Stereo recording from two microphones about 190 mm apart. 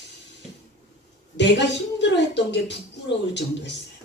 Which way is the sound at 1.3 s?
65° left (ahead or behind).